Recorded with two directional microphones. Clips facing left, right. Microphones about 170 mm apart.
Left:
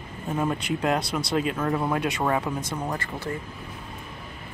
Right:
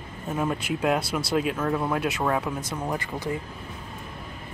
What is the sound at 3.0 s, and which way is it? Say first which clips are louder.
Speech: right 2 dB; 15° right (ahead or behind).